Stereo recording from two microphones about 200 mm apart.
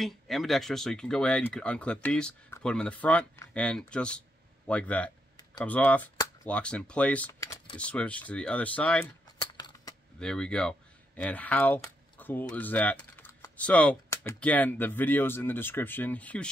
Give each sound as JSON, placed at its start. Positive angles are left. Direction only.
{"t": 0.0, "sound": "speech", "side_deg": 0}
{"t": 9.4, "sound": "a sound", "side_deg": 20}
{"t": 10.1, "sound": "speech", "side_deg": 5}